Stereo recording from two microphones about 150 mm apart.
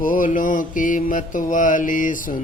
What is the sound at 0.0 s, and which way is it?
Mantra, 65° left (ahead or behind).